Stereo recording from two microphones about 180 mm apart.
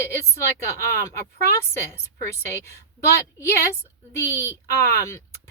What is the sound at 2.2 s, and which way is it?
A woman's voice, 15° left (ahead or behind).